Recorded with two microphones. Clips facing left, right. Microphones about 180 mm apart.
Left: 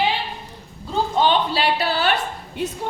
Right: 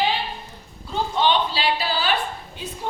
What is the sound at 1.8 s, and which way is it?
Speech, 65° left (ahead or behind).